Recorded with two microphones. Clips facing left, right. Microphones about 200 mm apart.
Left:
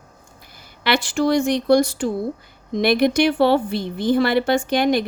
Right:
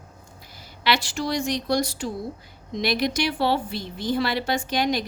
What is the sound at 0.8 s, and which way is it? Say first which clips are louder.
A woman's voice: left 6 dB; 50° left (ahead or behind).